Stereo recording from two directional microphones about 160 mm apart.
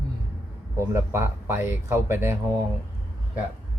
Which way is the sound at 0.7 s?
15° right (ahead or behind).